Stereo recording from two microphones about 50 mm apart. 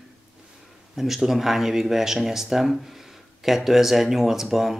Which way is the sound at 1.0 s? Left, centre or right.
Centre.